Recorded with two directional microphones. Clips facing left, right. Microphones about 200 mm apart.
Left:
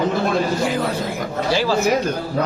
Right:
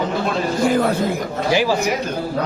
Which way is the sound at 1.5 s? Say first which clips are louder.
Right 1 dB; 15° right (ahead or behind).